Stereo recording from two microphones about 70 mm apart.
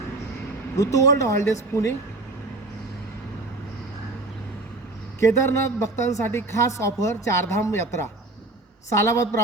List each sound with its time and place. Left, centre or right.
0.8 s speech: left
5.2 s speech: left